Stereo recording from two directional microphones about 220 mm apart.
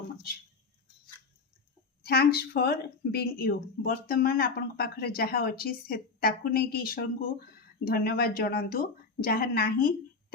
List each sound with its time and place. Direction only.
2.0 s speech: 45° left (ahead or behind)